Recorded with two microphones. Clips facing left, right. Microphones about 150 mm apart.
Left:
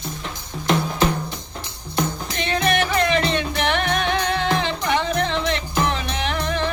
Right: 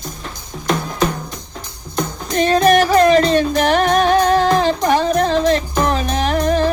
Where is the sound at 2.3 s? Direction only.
40° right (ahead or behind).